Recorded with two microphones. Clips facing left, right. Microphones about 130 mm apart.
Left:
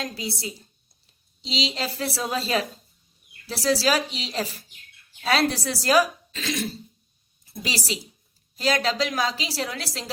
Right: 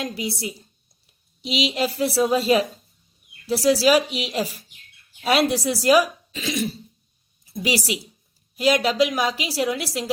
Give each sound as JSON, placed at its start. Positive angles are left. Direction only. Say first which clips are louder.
{"t": 0.0, "sound": "speech", "louder": "right 4 dB", "side_deg": -20}
{"t": 1.7, "sound": "speech", "louder": "right 7 dB", "side_deg": -15}